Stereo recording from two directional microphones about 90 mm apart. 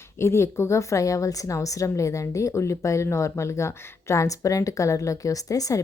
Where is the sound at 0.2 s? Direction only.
30° left (ahead or behind).